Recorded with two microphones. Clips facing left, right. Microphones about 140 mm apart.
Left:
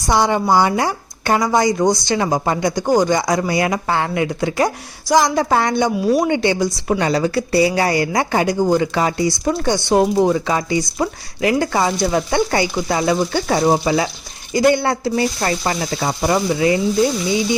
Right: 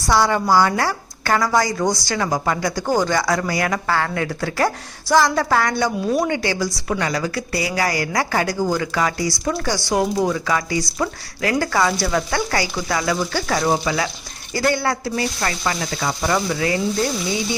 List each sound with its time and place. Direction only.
0.1 s speech: 20° left (ahead or behind)